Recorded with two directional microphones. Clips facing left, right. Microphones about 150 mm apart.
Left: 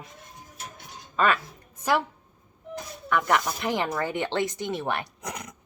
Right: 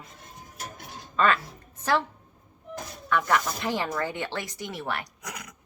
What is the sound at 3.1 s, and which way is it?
Speech, 15° left (ahead or behind).